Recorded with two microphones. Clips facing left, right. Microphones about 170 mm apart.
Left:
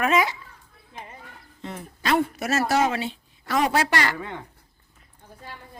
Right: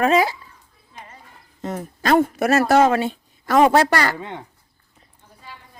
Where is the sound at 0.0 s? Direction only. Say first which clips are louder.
Right 5 dB; 35° right (ahead or behind).